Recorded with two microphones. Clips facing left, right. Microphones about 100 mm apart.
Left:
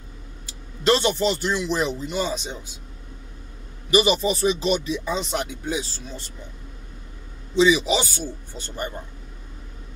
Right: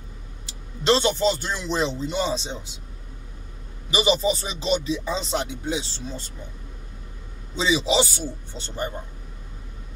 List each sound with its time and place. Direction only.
0.5 s speech: 25° right (ahead or behind)
3.9 s speech: 25° right (ahead or behind)
7.5 s speech: 30° right (ahead or behind)